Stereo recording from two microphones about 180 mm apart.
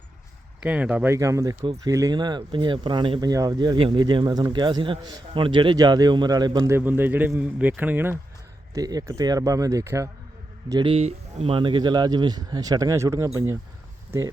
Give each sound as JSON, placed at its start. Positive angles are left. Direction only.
{"t": 0.6, "sound": "speech", "side_deg": -10}
{"t": 8.7, "sound": "speech", "side_deg": -20}